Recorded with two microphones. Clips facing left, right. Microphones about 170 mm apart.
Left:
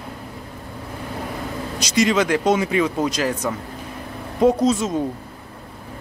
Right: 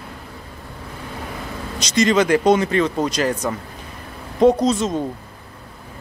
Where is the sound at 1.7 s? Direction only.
10° left (ahead or behind).